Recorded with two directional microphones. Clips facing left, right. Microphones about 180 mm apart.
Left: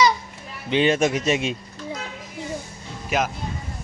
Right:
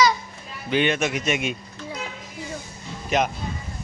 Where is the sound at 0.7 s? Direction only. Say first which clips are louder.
Left 3 dB; 30° left (ahead or behind).